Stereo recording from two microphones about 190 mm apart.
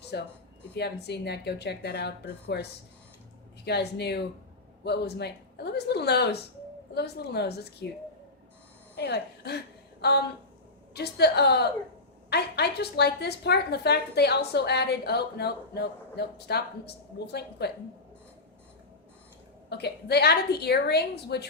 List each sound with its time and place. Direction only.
0.0 s music: 60° left (ahead or behind)
0.7 s a woman's voice: 60° left (ahead or behind)
9.0 s a woman's voice: 60° left (ahead or behind)
19.7 s a woman's voice: 60° left (ahead or behind)